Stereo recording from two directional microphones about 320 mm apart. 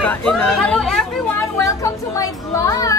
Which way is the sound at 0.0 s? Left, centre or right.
Centre.